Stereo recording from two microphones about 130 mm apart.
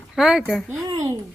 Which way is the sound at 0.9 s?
25° right (ahead or behind).